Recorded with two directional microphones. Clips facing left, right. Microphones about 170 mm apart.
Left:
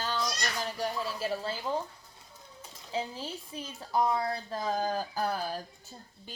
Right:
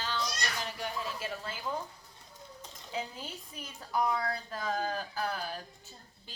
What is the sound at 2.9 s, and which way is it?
A woman's voice, 30° left (ahead or behind).